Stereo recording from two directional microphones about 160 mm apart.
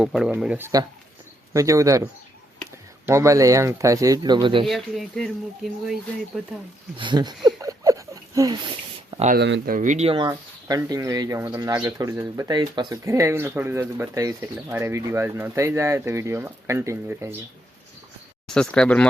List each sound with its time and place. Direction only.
0.0 s speech: 5° right (ahead or behind)
1.5 s speech: 20° right (ahead or behind)
3.1 s speech: 20° right (ahead or behind)
4.6 s speech: centre (ahead or behind)
6.9 s speech: 30° right (ahead or behind)
7.4 s a sound: 20° right (ahead or behind)
9.0 s a sound: 40° right (ahead or behind)
9.3 s speech: 65° right (ahead or behind)
10.2 s speech: 20° right (ahead or behind)
18.4 s speech: 5° left (ahead or behind)